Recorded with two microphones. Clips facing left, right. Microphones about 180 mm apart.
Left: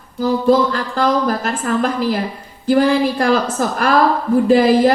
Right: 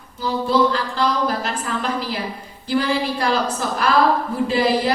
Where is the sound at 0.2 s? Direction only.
50° left (ahead or behind).